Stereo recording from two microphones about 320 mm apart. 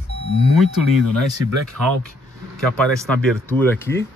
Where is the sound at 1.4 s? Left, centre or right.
Right.